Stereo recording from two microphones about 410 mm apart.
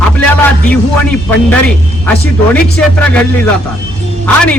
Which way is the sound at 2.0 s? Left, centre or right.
Centre.